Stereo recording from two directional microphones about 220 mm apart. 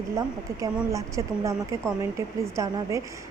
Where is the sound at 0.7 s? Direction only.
15° right (ahead or behind).